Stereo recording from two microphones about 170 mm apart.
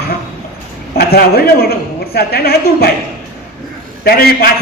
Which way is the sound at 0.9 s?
65° left (ahead or behind).